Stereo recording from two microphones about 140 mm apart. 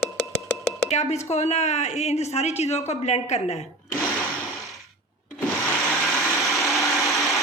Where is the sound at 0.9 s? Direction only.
50° left (ahead or behind).